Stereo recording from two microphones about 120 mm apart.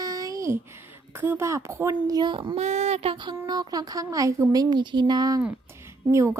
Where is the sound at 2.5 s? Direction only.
70° right (ahead or behind); by 6.3 s 25° right (ahead or behind).